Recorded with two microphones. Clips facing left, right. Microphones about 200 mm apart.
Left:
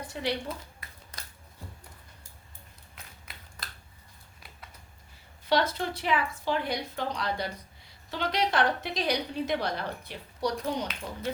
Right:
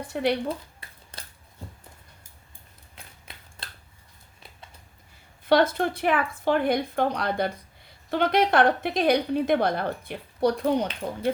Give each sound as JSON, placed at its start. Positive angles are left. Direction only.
{"t": 0.1, "sound": "a woman's voice", "side_deg": -55}
{"t": 0.4, "sound": "a sound", "side_deg": -30}
{"t": 5.5, "sound": "a woman's voice", "side_deg": -50}